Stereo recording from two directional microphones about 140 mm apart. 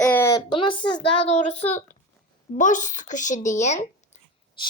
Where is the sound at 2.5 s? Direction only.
65° left (ahead or behind).